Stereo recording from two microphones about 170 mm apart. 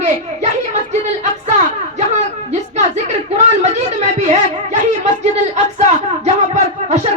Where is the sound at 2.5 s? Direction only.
40° right (ahead or behind).